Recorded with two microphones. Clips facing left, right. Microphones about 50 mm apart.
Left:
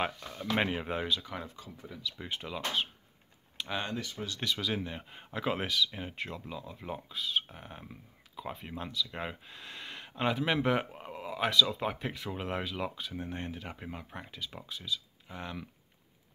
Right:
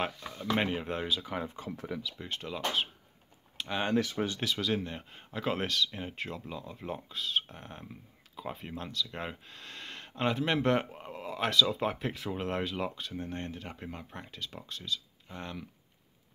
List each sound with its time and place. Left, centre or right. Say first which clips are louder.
0.4 s speech: even; centre
1.1 s speech: right 2 dB; centre
2.1 s speech: even; centre
3.5 s a sound: right 1 dB; centre
3.9 s speech: right 8 dB; right
4.4 s speech: right 2 dB; centre